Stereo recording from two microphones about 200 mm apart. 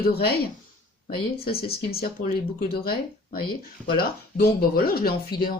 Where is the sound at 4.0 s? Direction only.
50° left (ahead or behind).